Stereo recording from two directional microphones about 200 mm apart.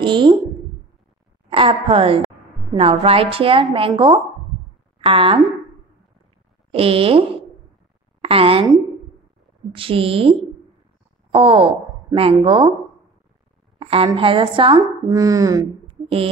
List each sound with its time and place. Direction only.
0.0 s speech: 25° right (ahead or behind)
1.5 s speech: 30° right (ahead or behind)
6.7 s a woman's voice: 30° right (ahead or behind)
9.8 s speech: 25° right (ahead or behind)
11.3 s a woman's voice: 25° right (ahead or behind)
13.7 s speech: 25° right (ahead or behind)